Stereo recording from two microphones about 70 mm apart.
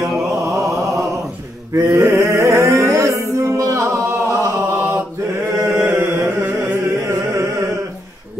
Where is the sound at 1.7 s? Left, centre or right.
Right.